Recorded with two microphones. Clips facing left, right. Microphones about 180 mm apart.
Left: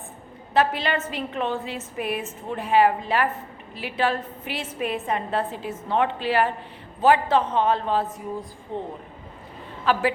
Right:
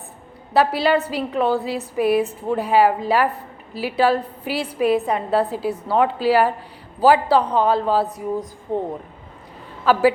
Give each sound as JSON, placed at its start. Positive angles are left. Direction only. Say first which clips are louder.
{"t": 0.6, "sound": "a woman's voice", "louder": "right 7 dB", "side_deg": -35}